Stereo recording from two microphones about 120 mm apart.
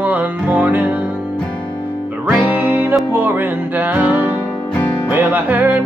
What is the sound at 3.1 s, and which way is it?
Music, 15° right (ahead or behind).